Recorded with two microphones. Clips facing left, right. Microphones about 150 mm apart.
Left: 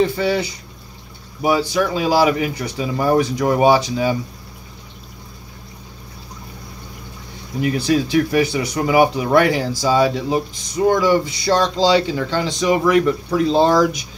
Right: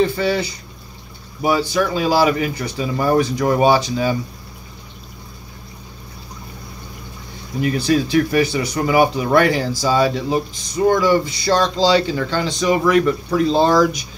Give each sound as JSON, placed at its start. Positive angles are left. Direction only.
{"t": 0.0, "sound": "speech", "side_deg": 15}
{"t": 7.6, "sound": "speech", "side_deg": 20}